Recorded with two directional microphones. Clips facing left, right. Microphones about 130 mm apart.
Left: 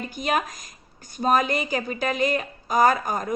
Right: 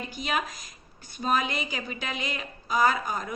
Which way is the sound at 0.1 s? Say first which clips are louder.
Left 6 dB; 45° left (ahead or behind).